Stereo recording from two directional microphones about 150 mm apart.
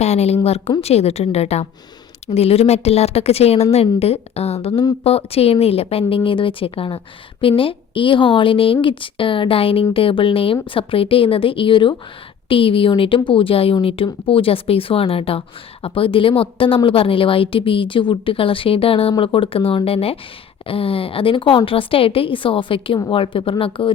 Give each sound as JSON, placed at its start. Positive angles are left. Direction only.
{"t": 0.0, "sound": "a woman's voice", "side_deg": 45}